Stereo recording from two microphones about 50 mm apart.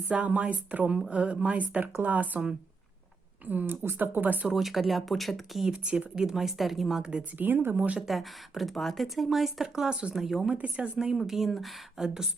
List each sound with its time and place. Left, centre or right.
0.1 s speech: right
3.4 s speech: right
4.5 s speech: centre
5.8 s speech: right
6.1 s speech: centre
7.3 s speech: right
7.8 s speech: right
8.0 s speech: centre
10.5 s speech: right
10.9 s speech: centre